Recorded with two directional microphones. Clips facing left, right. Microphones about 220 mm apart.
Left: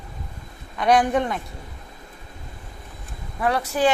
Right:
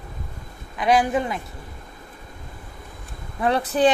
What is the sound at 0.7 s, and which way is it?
Speech, centre (ahead or behind).